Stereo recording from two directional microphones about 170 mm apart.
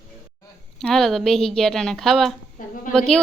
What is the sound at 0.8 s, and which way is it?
Speech, centre (ahead or behind).